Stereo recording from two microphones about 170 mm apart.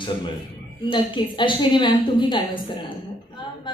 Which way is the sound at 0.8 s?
30° left (ahead or behind).